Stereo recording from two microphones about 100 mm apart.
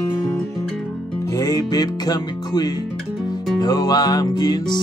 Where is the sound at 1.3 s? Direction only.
40° left (ahead or behind).